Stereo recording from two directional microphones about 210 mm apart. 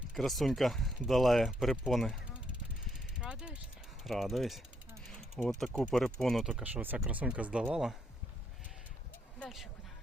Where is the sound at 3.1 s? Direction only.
5° right (ahead or behind).